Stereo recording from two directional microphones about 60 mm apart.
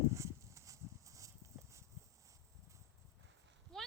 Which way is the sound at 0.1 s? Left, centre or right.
Right.